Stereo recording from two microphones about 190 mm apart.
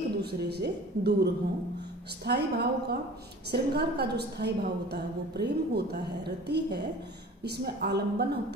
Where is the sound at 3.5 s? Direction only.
60° right (ahead or behind).